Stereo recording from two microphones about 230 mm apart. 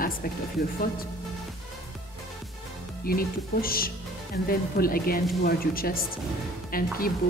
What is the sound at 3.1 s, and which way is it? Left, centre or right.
A woman's voice, left.